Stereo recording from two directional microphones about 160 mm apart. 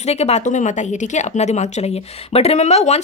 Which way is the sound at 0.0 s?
40° left (ahead or behind).